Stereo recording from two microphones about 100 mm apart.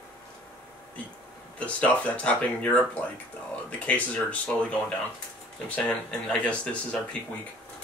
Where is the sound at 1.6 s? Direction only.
15° left (ahead or behind).